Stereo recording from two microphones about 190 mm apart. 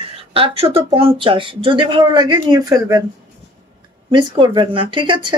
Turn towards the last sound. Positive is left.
turn(degrees=-25)  # may be behind; listen again after turning